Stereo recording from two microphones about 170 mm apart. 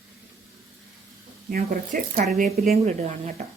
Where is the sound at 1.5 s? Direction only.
55° right (ahead or behind).